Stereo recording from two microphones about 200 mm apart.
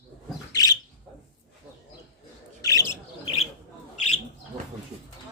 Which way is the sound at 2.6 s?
15° left (ahead or behind).